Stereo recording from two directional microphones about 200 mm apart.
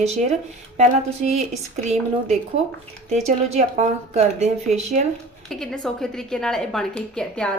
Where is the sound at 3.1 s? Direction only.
35° right (ahead or behind).